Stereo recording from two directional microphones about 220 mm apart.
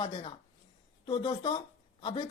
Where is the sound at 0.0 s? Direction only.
25° left (ahead or behind).